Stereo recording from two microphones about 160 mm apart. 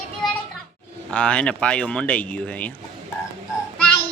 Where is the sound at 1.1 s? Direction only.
5° left (ahead or behind).